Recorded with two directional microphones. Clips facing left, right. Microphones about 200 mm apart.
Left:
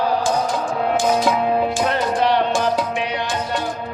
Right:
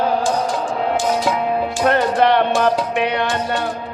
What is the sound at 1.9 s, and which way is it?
Music, 60° right (ahead or behind).